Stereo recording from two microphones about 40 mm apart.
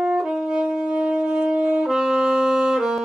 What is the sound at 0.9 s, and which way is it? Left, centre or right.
Wind instrument, right.